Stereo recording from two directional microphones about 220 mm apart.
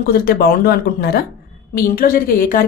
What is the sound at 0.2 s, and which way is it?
Speech, 45° left (ahead or behind).